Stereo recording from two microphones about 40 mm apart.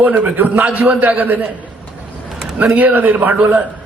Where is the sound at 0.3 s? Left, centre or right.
Right.